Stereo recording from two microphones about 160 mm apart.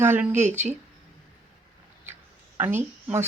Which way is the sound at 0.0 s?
15° right (ahead or behind).